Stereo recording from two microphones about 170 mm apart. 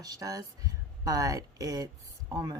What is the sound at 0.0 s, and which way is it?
Speech, 20° right (ahead or behind).